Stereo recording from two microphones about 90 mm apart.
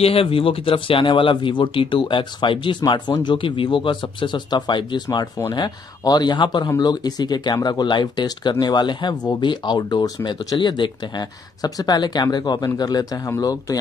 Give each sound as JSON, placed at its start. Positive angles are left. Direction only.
{"t": 0.0, "sound": "speech", "side_deg": 90}